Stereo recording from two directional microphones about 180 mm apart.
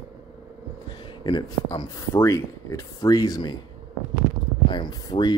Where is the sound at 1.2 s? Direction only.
25° left (ahead or behind).